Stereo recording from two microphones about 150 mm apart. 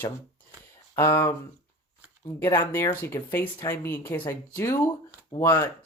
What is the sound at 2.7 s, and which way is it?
Speech, 15° left (ahead or behind).